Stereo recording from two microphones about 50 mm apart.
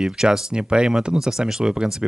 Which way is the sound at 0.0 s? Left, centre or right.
Centre.